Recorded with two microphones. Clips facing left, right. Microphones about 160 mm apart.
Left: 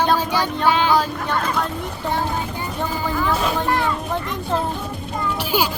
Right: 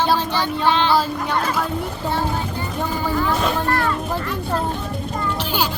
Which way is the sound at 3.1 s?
5° right (ahead or behind).